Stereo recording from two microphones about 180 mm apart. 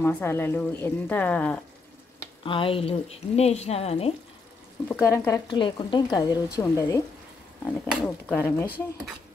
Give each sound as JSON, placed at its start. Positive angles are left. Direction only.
{"t": 0.0, "sound": "a woman's voice", "side_deg": 15}
{"t": 2.4, "sound": "speech", "side_deg": 30}
{"t": 4.8, "sound": "speech", "side_deg": 15}
{"t": 8.3, "sound": "a woman's voice", "side_deg": 10}
{"t": 8.6, "sound": "speech", "side_deg": -10}